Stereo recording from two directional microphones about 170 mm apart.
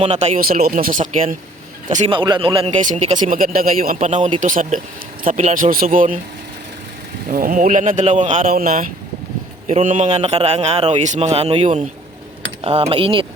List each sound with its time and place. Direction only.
0.0 s speech: 40° right (ahead or behind)
0.4 s speech: 55° right (ahead or behind)
2.0 s speech: 25° right (ahead or behind); by 3.9 s 55° right (ahead or behind)
3.9 s speech: 45° right (ahead or behind)
7.3 s speech: 55° right (ahead or behind); by 13.2 s 30° right (ahead or behind)